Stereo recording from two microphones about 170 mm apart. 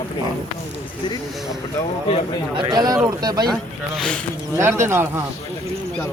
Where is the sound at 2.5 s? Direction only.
25° right (ahead or behind).